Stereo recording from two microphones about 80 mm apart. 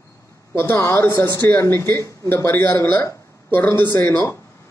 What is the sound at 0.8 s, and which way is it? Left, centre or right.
A man's voice, left.